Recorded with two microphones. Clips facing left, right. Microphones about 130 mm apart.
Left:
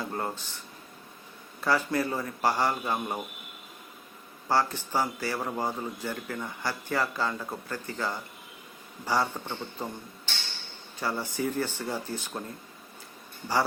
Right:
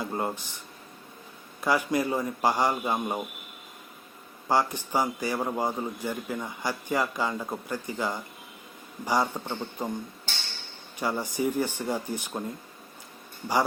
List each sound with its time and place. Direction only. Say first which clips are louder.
0.0 s speech: right 2 dB; 15° right (ahead or behind)
1.6 s a man's voice: right 1 dB; 15° right (ahead or behind)
4.4 s a man's voice: right 1 dB; 15° right (ahead or behind)
11.0 s a man's voice: right 3 dB; 15° right (ahead or behind)